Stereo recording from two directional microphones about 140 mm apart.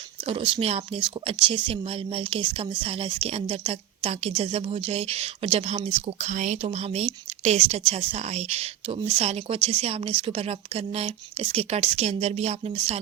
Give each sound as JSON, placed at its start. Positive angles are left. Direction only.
{"t": 0.3, "sound": "speech", "side_deg": -40}